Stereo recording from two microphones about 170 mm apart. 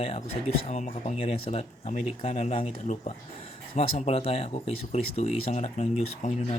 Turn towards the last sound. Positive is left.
turn(degrees=40)  # may be behind; listen again after turning